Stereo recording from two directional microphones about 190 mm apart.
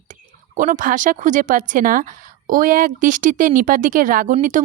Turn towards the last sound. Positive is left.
turn(degrees=-40)  # may be behind; listen again after turning